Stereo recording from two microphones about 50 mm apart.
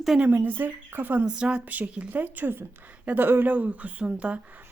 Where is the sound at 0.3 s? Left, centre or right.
Right.